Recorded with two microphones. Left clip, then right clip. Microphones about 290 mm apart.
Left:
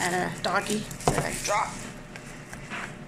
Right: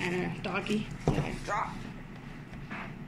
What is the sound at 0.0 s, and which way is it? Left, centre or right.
Speech, centre.